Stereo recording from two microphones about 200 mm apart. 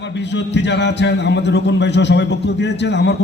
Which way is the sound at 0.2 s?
60° left (ahead or behind).